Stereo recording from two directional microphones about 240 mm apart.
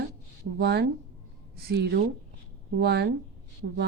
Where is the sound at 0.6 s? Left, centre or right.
Right.